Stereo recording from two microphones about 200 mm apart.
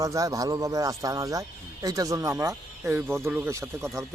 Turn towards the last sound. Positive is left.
turn(degrees=-15)  # may be behind; listen again after turning